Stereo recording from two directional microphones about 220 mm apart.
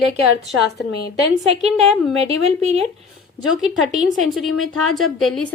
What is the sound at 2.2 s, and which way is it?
Speech, 30° right (ahead or behind).